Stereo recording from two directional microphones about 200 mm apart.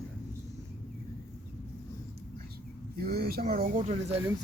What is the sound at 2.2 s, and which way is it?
Bird, 50° right (ahead or behind).